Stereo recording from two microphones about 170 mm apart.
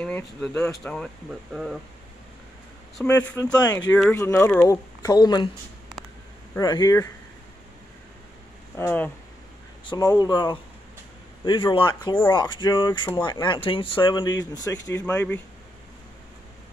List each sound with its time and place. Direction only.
0.0 s speech: 10° left (ahead or behind)
0.9 s speech: centre (ahead or behind)
3.0 s speech: 10° left (ahead or behind)
4.1 s speech: 20° left (ahead or behind)
6.6 s speech: 25° left (ahead or behind)
8.7 s speech: 10° left (ahead or behind)
9.8 s speech: 25° left (ahead or behind)
15.0 s speech: 10° left (ahead or behind)